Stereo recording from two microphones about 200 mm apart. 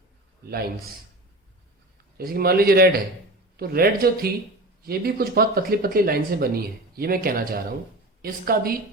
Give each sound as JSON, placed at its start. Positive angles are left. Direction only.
{"t": 0.4, "sound": "speech", "side_deg": -50}
{"t": 2.1, "sound": "speech", "side_deg": -50}